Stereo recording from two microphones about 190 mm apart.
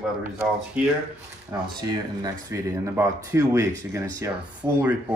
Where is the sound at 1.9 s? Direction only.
20° right (ahead or behind).